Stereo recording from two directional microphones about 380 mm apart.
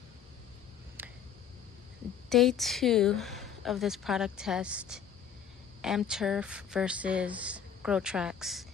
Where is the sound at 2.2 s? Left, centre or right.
Centre.